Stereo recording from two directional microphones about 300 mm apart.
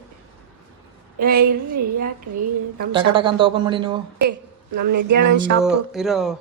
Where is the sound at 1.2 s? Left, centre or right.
Right.